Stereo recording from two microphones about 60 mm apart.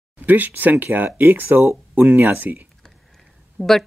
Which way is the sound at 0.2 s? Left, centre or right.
Right.